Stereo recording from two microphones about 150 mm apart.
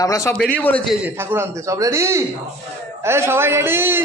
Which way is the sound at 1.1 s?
15° right (ahead or behind).